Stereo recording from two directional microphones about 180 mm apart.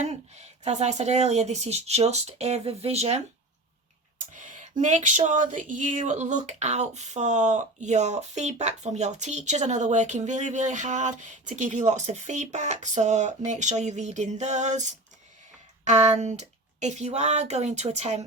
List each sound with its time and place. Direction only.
0.0 s speech: 40° right (ahead or behind)
4.3 s a sound: 45° right (ahead or behind)
4.8 s speech: 45° right (ahead or behind)